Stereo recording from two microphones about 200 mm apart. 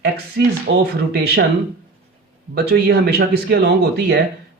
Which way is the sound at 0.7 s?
65° right (ahead or behind).